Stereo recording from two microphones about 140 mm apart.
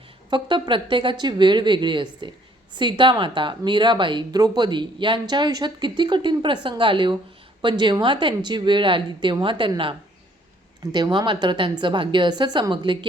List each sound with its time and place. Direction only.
0.3 s speech: 35° right (ahead or behind)
10.9 s speech: 30° right (ahead or behind)